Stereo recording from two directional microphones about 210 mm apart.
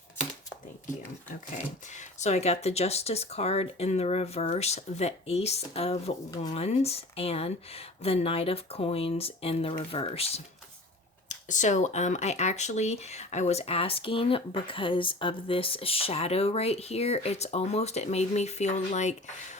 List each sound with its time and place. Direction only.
1.9 s speech: 35° left (ahead or behind)